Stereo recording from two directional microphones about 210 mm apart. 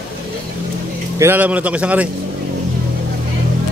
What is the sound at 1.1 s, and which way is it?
Speech, 10° right (ahead or behind).